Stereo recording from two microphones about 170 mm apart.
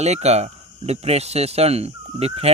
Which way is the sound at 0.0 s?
40° right (ahead or behind).